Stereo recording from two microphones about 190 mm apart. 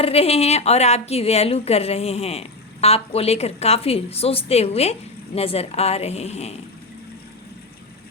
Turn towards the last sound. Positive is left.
turn(degrees=35)  # may be behind; listen again after turning